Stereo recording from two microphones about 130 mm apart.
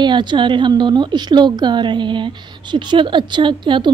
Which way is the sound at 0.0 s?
35° right (ahead or behind).